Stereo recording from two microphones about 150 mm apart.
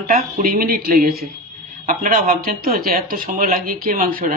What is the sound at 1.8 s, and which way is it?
Speech, 75° right (ahead or behind).